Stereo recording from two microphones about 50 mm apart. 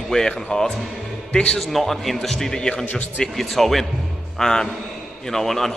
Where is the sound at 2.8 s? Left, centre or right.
Left.